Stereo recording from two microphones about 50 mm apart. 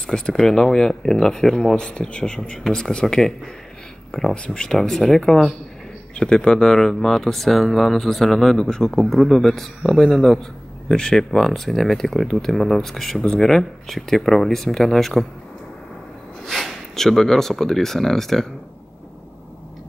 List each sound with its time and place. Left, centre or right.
0.0 s speech: centre
1.8 s speech: left
4.7 s speech: centre
16.4 s speech: centre